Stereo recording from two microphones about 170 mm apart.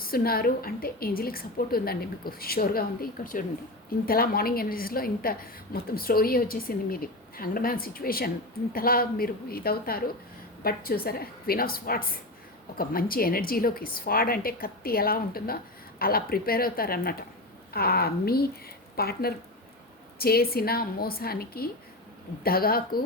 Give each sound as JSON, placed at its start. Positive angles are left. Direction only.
{"t": 0.1, "sound": "a woman's voice", "side_deg": 60}